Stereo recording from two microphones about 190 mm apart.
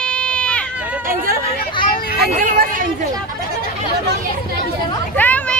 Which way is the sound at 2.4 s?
45° right (ahead or behind).